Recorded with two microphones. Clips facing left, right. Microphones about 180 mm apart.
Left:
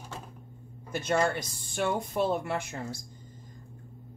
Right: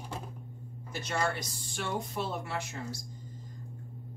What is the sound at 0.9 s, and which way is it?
Speech, 55° left (ahead or behind).